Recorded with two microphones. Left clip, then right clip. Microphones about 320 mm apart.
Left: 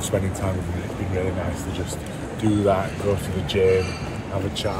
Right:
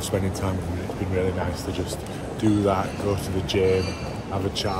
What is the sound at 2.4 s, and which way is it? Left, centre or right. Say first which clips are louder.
Speech: left 2 dB; centre.